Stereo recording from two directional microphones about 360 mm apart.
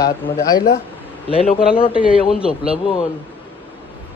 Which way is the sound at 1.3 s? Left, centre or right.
Centre.